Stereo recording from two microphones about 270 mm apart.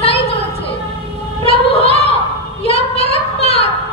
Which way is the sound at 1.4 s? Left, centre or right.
Left.